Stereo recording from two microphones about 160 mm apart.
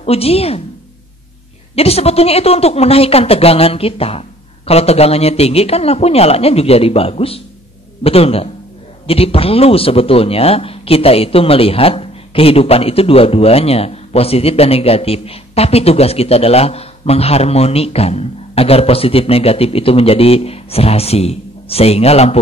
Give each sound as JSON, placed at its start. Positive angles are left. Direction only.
{"t": 0.0, "sound": "speech", "side_deg": 40}
{"t": 1.8, "sound": "speech", "side_deg": 40}